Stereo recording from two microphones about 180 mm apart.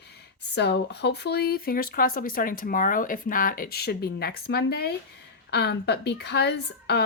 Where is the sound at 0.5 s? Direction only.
70° left (ahead or behind).